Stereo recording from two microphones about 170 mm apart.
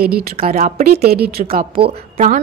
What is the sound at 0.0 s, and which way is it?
Speech, 60° right (ahead or behind).